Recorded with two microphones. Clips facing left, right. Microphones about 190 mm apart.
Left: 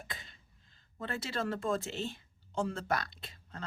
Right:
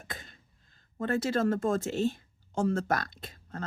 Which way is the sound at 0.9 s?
45° right (ahead or behind).